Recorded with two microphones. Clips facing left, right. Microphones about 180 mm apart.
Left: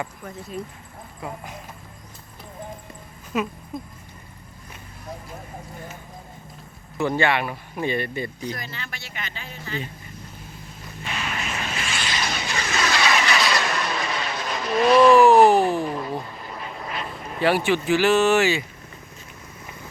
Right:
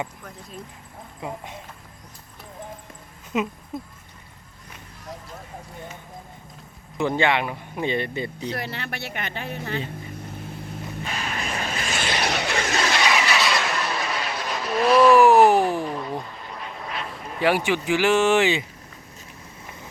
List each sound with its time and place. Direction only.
3.3 s speech: 20° right (ahead or behind)
7.0 s speech: 20° right (ahead or behind)
8.5 s speech: 65° right (ahead or behind)
11.0 s vehicle: 40° right (ahead or behind)
12.0 s vehicle: 65° right (ahead or behind)
12.7 s vehicle: 25° right (ahead or behind)
13.1 s vehicle: 10° right (ahead or behind)
15.8 s quack: 5° left (ahead or behind)
17.4 s speech: 10° right (ahead or behind)